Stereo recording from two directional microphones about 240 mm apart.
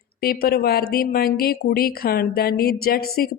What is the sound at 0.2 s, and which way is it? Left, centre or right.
Speech, left.